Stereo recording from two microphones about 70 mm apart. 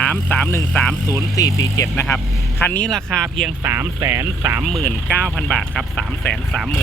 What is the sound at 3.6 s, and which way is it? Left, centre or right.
Speech, right.